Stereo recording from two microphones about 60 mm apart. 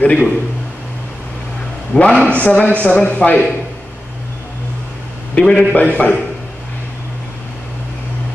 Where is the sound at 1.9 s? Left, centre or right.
Centre.